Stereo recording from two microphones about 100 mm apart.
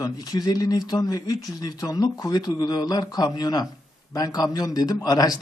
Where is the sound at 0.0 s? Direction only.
40° left (ahead or behind).